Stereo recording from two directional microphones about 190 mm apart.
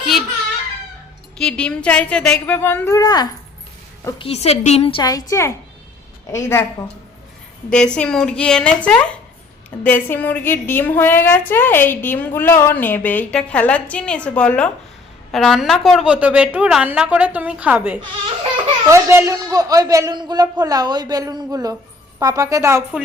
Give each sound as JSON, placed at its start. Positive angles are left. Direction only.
{"t": 1.4, "sound": "a woman's voice", "side_deg": 5}
{"t": 4.2, "sound": "a woman's voice", "side_deg": 30}